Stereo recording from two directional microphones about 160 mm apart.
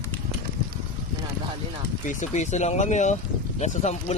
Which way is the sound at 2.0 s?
50° left (ahead or behind).